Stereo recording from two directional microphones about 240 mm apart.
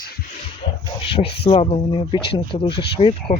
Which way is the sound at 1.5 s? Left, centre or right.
Left.